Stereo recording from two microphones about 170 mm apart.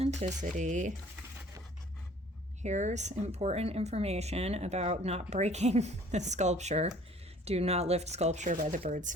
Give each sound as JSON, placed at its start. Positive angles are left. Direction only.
{"t": 0.0, "sound": "speech", "side_deg": -40}
{"t": 2.6, "sound": "speech", "side_deg": -45}